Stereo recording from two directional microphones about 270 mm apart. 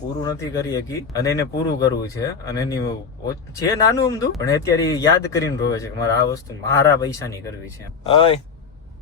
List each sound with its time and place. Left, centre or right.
0.2 s speech: centre